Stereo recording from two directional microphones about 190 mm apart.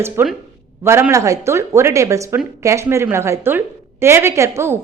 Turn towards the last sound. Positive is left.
turn(degrees=-15)  # may be behind; listen again after turning